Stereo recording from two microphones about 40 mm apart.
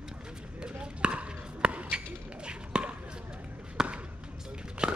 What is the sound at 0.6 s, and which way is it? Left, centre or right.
Chop, right.